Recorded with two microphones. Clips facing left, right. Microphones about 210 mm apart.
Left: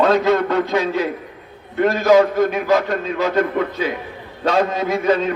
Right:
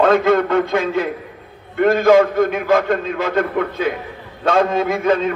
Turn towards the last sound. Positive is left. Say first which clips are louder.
# right 1 dB
turn(degrees=-50)  # may be behind; listen again after turning